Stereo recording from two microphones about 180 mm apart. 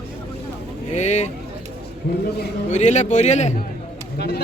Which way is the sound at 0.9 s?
40° left (ahead or behind).